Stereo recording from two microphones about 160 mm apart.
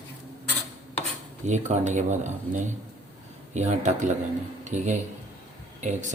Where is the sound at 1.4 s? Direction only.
50° right (ahead or behind).